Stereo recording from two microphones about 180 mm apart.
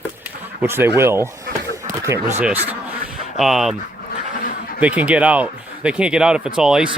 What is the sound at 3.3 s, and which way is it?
Speech, centre (ahead or behind).